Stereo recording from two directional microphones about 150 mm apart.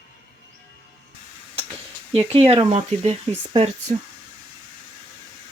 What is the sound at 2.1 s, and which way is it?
Speech, 40° right (ahead or behind).